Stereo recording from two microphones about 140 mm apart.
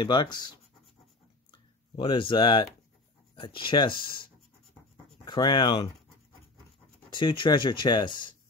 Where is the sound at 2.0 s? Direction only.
35° left (ahead or behind).